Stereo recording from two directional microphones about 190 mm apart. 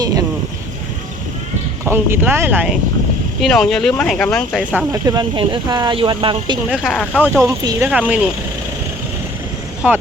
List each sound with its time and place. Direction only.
0.0 s speech: 20° right (ahead or behind)
1.8 s speech: 15° right (ahead or behind)
3.4 s speech: centre (ahead or behind)
4.9 s speech: 20° right (ahead or behind)
6.7 s speech: 5° left (ahead or behind)
7.4 s speech: 15° right (ahead or behind)
7.9 s speech: 5° right (ahead or behind)